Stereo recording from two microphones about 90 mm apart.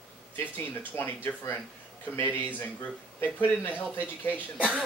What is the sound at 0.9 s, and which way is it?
Speech, 25° left (ahead or behind).